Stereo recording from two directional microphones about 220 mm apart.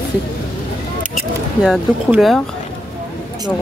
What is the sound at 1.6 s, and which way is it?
Speech, centre (ahead or behind).